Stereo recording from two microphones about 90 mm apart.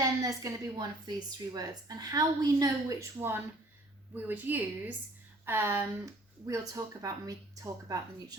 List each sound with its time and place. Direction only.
0.0 s a woman's voice: 40° right (ahead or behind)
3.2 s a woman's voice: 25° right (ahead or behind)